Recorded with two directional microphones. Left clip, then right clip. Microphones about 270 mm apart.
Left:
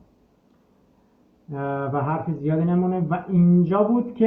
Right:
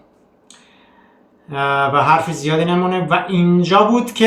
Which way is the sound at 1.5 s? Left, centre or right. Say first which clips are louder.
Right 11 dB; centre.